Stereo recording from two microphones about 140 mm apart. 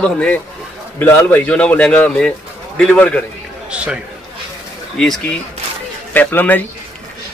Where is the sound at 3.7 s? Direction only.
10° right (ahead or behind).